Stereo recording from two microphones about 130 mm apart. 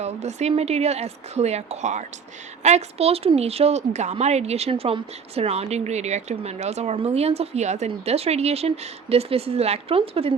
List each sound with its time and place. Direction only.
0.0 s a woman's voice: 60° right (ahead or behind)